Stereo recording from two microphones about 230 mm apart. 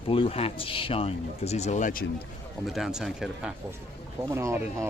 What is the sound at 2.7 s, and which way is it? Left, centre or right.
Speech, centre.